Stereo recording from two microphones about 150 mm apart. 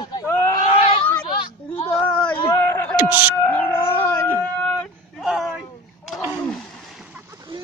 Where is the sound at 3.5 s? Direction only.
15° left (ahead or behind).